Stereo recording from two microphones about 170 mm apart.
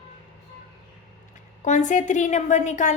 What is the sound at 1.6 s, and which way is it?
A woman's voice, 45° left (ahead or behind).